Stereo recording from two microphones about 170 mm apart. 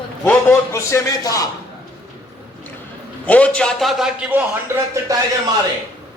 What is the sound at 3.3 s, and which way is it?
A man's voice, 5° left (ahead or behind).